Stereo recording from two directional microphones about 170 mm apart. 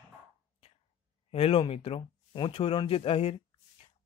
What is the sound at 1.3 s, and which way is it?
Speech, 35° left (ahead or behind).